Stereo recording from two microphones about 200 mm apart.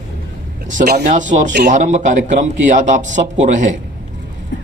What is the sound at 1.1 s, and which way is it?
Speech, 40° right (ahead or behind).